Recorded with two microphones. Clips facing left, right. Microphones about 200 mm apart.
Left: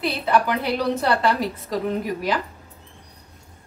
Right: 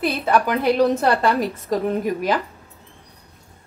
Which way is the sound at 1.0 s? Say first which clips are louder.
Right 2 dB; 50° right (ahead or behind).